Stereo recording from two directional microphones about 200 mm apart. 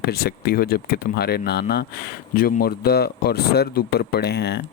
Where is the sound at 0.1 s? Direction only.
50° left (ahead or behind).